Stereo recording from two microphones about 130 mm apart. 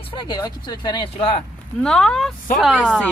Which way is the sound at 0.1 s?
35° left (ahead or behind).